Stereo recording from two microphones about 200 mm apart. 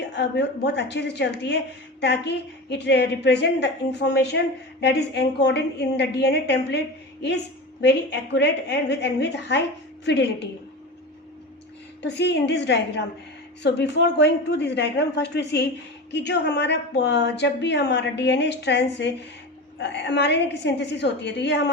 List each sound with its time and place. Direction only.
0.1 s a woman's voice: 60° left (ahead or behind)
12.0 s a woman's voice: 60° left (ahead or behind)